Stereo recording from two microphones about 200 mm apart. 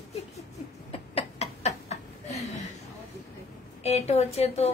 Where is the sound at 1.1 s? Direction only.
30° left (ahead or behind).